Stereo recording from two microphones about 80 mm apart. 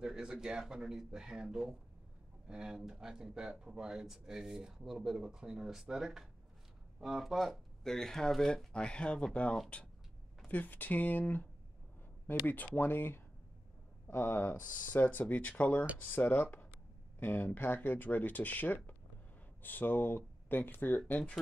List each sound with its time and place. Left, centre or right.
0.0 s speech: centre; by 11.4 s left
12.4 s speech: left